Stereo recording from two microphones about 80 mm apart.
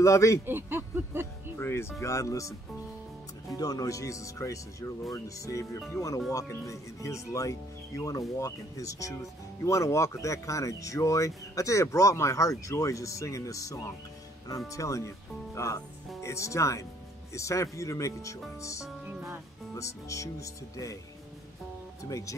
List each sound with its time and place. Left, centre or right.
0.0 s speech: left
0.5 s a sound: right
1.6 s speech: left
3.5 s speech: left
19.0 s music: centre
19.7 s speech: left
22.0 s speech: left